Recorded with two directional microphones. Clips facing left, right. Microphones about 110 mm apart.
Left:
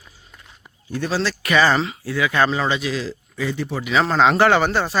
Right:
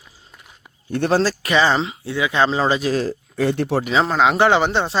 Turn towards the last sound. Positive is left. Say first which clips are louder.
# right 1 dB
turn(degrees=-25)  # may be behind; listen again after turning